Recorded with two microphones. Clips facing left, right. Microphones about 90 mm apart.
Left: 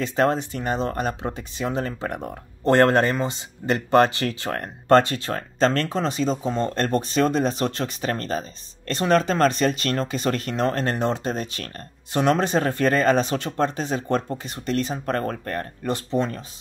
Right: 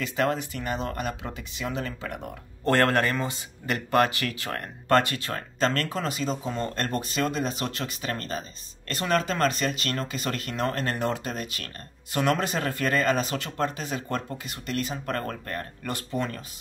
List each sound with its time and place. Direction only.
0.0 s speech: 35° left (ahead or behind)
2.6 s speech: 25° left (ahead or behind)
15.9 s speech: 25° left (ahead or behind)